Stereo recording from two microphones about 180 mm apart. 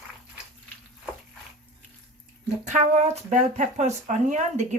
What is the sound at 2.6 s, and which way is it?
Speech, 40° right (ahead or behind).